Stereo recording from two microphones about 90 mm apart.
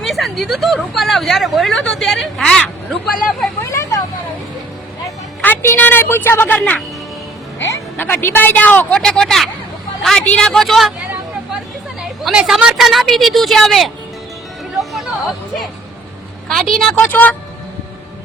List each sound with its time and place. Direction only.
0.0 s speech: centre (ahead or behind)
3.6 s vehicle: 35° left (ahead or behind)
5.4 s a woman's voice: 20° left (ahead or behind)
6.6 s a woman's voice: 10° left (ahead or behind)
7.9 s a woman's voice: 25° left (ahead or behind); by 10.9 s centre (ahead or behind)
12.2 s speech: 5° right (ahead or behind)
14.8 s music: centre (ahead or behind)
16.5 s speech: centre (ahead or behind)
16.9 s speech: 20° left (ahead or behind)